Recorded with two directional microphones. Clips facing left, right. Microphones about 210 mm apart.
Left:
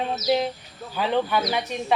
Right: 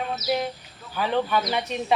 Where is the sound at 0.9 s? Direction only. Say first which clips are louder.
Left 1 dB; 15° left (ahead or behind).